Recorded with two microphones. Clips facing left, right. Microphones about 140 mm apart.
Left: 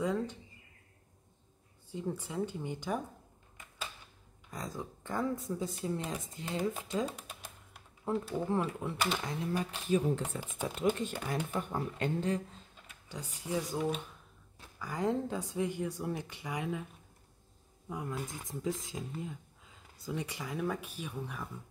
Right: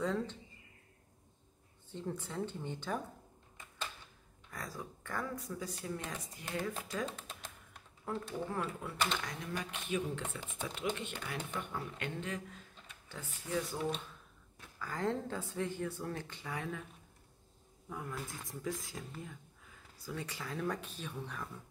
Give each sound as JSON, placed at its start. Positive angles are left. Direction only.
{"t": 0.0, "sound": "speech", "side_deg": 10}
{"t": 1.9, "sound": "speech", "side_deg": 10}
{"t": 3.5, "sound": "a sound", "side_deg": 10}
{"t": 4.5, "sound": "speech", "side_deg": 20}
{"t": 7.1, "sound": "typing", "side_deg": 10}
{"t": 8.1, "sound": "speech", "side_deg": 25}
{"t": 12.8, "sound": "speech", "side_deg": 15}
{"t": 17.8, "sound": "speech", "side_deg": 15}